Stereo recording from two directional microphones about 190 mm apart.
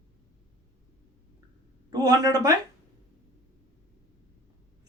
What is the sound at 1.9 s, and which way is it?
Speech, 20° right (ahead or behind).